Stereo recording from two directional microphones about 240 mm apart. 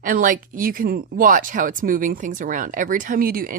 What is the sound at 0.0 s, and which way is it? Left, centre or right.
Speech, right.